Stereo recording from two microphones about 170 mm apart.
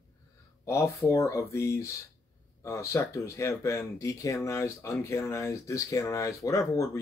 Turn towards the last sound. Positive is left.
turn(degrees=15)  # may be behind; listen again after turning